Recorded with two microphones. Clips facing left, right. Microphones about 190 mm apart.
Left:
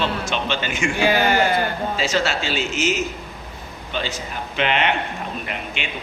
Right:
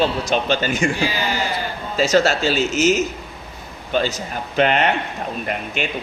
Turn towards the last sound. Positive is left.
turn(degrees=-45)  # may be behind; listen again after turning